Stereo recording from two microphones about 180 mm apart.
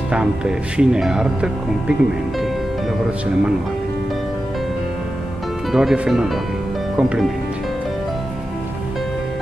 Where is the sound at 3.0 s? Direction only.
5° right (ahead or behind).